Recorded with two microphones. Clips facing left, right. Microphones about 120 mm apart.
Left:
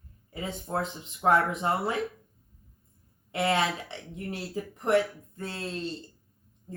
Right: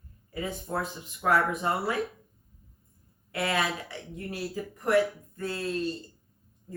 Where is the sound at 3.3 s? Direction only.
25° left (ahead or behind).